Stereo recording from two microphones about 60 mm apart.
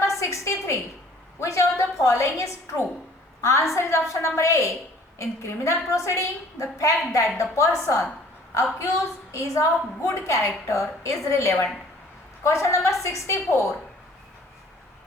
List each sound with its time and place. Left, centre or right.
0.0 s a woman's voice: left
9.3 s a woman's voice: left